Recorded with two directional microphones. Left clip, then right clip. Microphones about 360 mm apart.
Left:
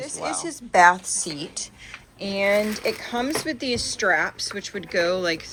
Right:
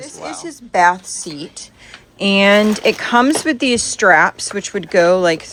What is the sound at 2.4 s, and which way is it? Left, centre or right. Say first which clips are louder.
Speech: right 8 dB; right.